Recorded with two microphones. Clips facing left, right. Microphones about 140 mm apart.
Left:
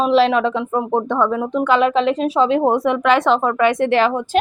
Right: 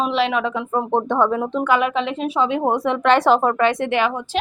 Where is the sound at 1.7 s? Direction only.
30° left (ahead or behind).